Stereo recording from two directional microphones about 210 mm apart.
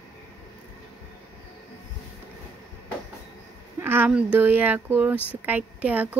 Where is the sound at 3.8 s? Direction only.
10° right (ahead or behind).